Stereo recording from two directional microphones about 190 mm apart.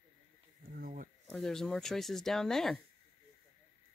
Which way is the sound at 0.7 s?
50° right (ahead or behind).